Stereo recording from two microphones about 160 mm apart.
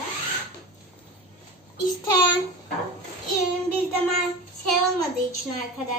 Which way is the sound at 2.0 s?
25° left (ahead or behind).